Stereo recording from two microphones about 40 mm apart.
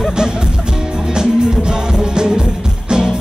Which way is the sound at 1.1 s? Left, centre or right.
Centre.